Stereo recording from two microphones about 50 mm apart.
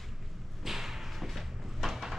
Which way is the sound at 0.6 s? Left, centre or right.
Centre.